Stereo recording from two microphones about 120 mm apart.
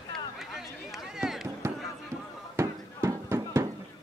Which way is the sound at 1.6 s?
20° right (ahead or behind).